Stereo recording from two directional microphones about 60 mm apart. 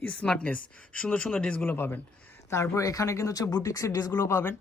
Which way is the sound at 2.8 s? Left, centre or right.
Left.